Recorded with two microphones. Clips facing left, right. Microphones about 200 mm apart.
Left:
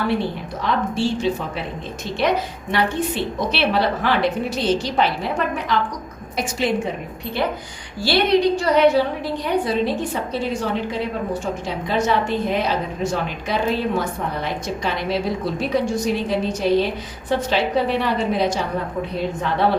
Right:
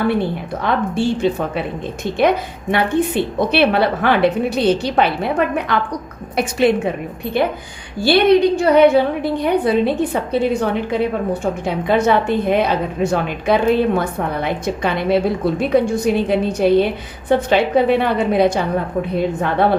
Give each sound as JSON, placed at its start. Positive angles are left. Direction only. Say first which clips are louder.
{"t": 0.6, "sound": "a woman's voice", "louder": "right 3 dB", "side_deg": -55}
{"t": 2.7, "sound": "a woman's voice", "louder": "right 5 dB", "side_deg": -55}
{"t": 8.0, "sound": "a woman's voice", "louder": "right 5 dB", "side_deg": -55}